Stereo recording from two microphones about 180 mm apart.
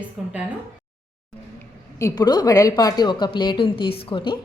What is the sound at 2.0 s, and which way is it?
A woman's voice, 20° left (ahead or behind).